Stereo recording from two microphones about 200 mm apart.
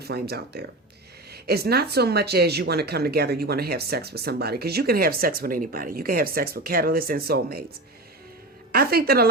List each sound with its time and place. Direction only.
0.0 s speech: 55° right (ahead or behind)
8.7 s speech: 50° right (ahead or behind)